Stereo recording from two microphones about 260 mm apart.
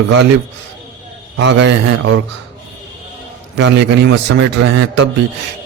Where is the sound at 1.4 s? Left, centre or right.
Right.